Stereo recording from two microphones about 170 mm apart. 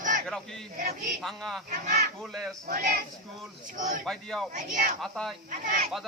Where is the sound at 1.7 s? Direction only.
45° right (ahead or behind).